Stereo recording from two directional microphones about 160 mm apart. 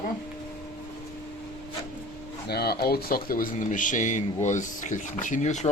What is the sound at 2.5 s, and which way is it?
Speech, 85° left.